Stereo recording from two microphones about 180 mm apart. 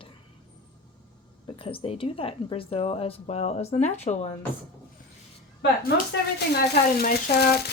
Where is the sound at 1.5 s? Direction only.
30° left (ahead or behind).